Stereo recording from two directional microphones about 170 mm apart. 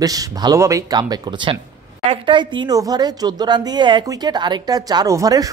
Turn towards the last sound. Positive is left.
turn(degrees=-20)  # may be behind; listen again after turning